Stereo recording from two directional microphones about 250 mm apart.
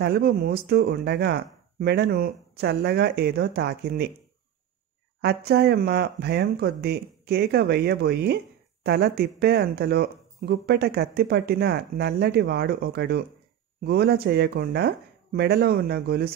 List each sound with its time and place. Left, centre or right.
0.0 s speech: right
5.2 s speech: right